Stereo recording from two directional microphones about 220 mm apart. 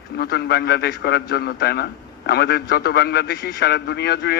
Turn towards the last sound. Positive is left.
turn(degrees=50)  # may be behind; listen again after turning